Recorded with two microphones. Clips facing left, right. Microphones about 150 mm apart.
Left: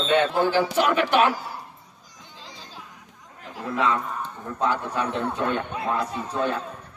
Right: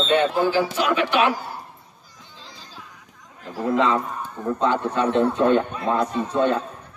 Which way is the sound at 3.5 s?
35° right (ahead or behind).